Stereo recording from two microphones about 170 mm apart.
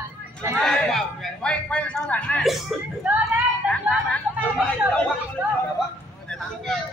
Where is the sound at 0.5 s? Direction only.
Centre (ahead or behind).